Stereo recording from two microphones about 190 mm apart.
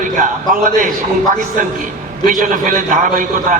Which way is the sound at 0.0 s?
45° right (ahead or behind).